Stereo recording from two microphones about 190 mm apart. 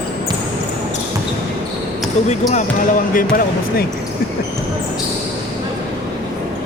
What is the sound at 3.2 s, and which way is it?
Speech, 50° left (ahead or behind).